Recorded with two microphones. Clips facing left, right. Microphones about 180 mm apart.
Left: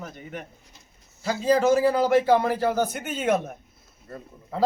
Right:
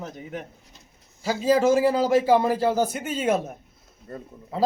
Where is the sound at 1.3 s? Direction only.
10° right (ahead or behind).